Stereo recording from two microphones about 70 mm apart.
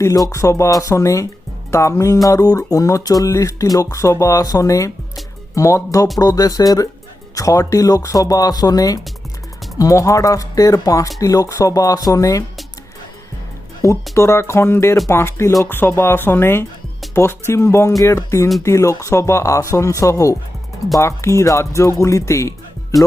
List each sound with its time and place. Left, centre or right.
0.3 s speech: left
2.2 s music: left
3.9 s speech: left
6.1 s music: left
9.7 s speech: left
14.1 s speech: left